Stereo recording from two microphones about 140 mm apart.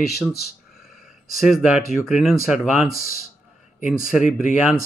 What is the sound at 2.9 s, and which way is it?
Speech, 90° left.